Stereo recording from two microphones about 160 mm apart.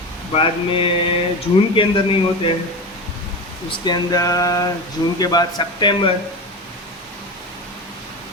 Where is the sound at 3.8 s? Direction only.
25° left (ahead or behind).